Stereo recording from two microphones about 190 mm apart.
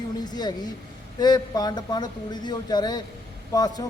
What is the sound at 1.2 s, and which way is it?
A man's voice, 20° left (ahead or behind).